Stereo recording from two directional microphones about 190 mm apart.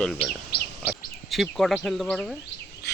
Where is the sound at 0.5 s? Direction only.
55° left (ahead or behind).